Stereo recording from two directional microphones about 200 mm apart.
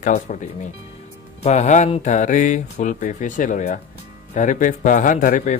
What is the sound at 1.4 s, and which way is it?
Speech, 35° left (ahead or behind).